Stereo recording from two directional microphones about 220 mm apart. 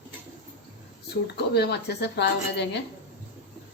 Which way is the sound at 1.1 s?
50° left (ahead or behind).